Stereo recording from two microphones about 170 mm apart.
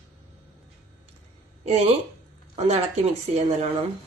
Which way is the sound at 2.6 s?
40° right (ahead or behind).